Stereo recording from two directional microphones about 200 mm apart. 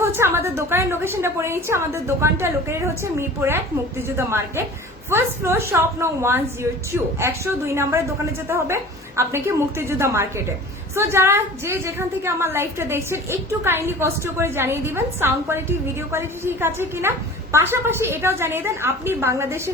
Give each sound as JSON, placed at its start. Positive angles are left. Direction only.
{"t": 0.0, "sound": "a woman's voice", "side_deg": -10}